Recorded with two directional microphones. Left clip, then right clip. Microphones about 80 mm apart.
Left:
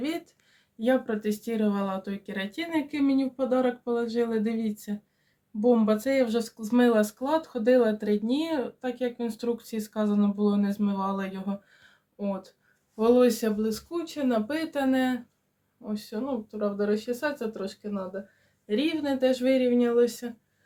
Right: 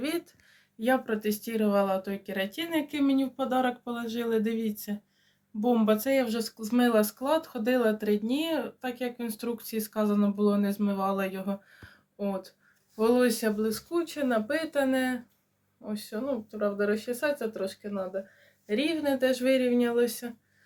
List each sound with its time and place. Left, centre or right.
0.8 s speech: left
14.0 s speech: left
14.3 s speech: left